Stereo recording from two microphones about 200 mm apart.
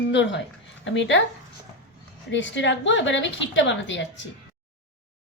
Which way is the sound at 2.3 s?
65° left (ahead or behind).